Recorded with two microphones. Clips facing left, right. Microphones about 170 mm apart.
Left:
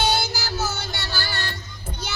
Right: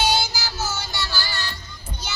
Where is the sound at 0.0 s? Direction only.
60° left (ahead or behind).